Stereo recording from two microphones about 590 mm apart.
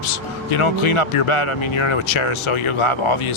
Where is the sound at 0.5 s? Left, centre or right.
Left.